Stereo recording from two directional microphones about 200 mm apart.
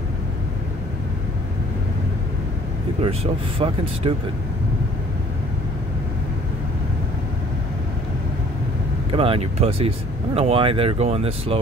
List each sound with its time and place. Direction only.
3.0 s speech: 25° right (ahead or behind)
9.1 s speech: 25° right (ahead or behind)